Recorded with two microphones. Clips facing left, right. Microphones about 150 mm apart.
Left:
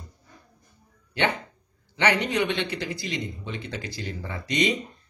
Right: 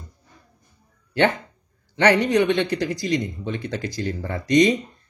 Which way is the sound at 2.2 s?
45° right (ahead or behind).